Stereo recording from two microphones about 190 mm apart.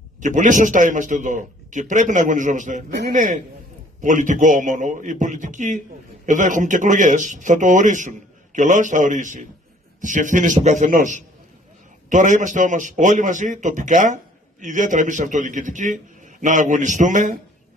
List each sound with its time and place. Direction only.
0.2 s a man's voice: 40° right (ahead or behind)